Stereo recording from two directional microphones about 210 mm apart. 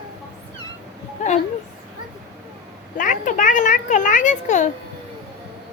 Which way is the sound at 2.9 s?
40° left (ahead or behind).